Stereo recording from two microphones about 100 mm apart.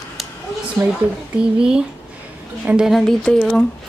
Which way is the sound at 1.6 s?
10° right (ahead or behind).